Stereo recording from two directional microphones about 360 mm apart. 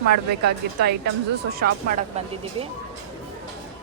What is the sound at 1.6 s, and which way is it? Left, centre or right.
A woman's voice, centre.